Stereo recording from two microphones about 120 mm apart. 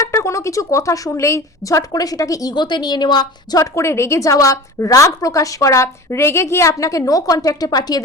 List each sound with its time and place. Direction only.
0.0 s a woman's voice: 20° left (ahead or behind); by 3.6 s 35° left (ahead or behind)
3.6 s a woman's voice: 25° left (ahead or behind)